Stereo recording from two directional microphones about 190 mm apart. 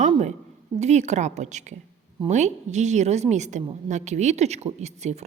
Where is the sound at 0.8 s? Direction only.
35° right (ahead or behind).